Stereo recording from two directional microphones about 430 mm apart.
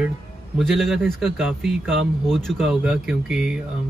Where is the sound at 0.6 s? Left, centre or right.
Centre.